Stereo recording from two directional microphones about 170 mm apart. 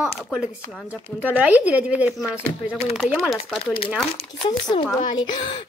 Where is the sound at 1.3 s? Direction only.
10° right (ahead or behind).